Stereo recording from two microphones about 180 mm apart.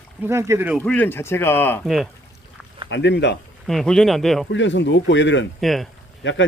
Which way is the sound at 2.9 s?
75° left (ahead or behind).